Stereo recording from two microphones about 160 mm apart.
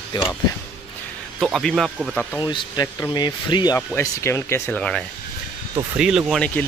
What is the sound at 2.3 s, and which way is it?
Speech, 25° left (ahead or behind).